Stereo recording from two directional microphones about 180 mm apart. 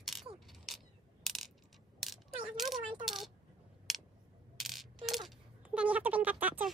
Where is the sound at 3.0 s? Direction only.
Centre (ahead or behind).